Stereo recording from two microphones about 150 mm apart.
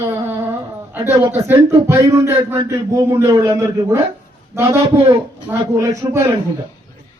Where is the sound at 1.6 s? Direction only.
20° right (ahead or behind).